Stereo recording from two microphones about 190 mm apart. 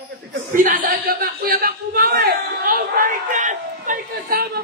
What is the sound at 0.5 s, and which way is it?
Speech, 45° right (ahead or behind).